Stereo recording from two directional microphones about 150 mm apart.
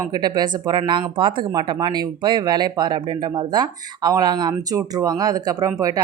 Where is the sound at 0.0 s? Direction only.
25° right (ahead or behind).